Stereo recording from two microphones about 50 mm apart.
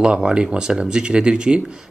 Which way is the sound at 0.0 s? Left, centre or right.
Centre.